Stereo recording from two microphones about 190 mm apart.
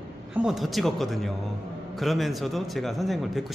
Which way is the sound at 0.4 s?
Centre (ahead or behind).